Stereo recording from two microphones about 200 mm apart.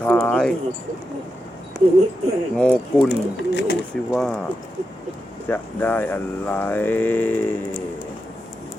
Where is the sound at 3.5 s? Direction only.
60° left (ahead or behind).